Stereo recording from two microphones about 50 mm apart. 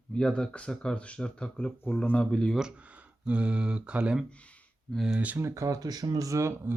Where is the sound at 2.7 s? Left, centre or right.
Right.